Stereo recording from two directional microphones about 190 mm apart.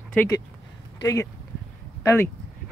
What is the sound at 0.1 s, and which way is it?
Speech, 10° left (ahead or behind).